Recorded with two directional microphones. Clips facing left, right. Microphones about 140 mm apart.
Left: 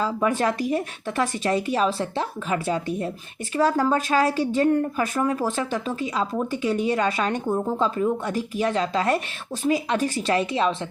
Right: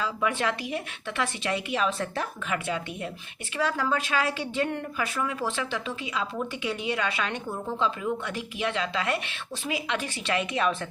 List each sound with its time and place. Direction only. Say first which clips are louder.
0.0 s speech: left 5 dB; 40° left (ahead or behind)